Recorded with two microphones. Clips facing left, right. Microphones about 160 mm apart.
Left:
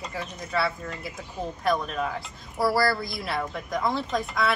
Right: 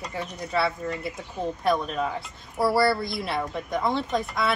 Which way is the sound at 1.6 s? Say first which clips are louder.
Right 1 dB; centre (ahead or behind).